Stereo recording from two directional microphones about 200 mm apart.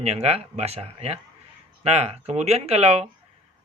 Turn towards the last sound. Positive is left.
turn(degrees=-30)  # may be behind; listen again after turning